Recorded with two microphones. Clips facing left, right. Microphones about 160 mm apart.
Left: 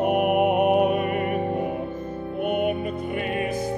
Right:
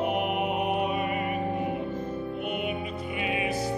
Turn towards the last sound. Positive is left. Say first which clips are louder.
# left 3 dB
turn(degrees=50)  # may be behind; listen again after turning